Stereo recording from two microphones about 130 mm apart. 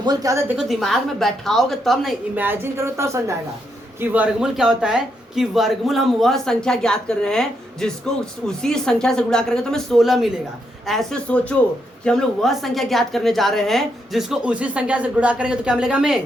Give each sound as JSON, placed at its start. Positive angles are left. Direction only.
{"t": 0.0, "sound": "a woman's voice", "side_deg": -30}
{"t": 0.5, "sound": "speech", "side_deg": 0}
{"t": 2.3, "sound": "a woman's voice", "side_deg": -15}